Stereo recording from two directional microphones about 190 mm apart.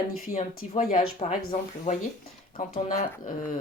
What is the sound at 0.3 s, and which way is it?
Speech, 45° left (ahead or behind).